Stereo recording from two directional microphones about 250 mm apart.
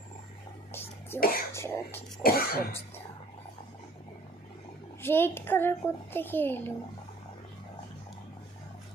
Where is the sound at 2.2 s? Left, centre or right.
Left.